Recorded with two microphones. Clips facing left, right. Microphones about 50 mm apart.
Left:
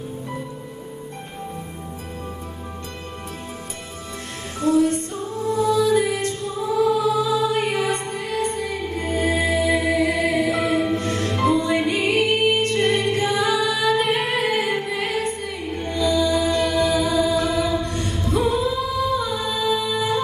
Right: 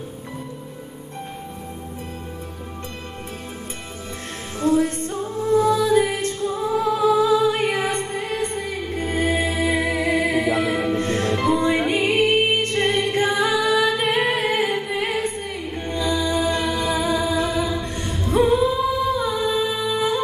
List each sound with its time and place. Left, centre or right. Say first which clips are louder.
4.6 s music: left 1 dB; right